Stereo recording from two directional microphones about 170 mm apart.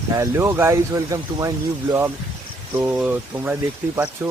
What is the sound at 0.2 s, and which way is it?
Speech, 15° right (ahead or behind).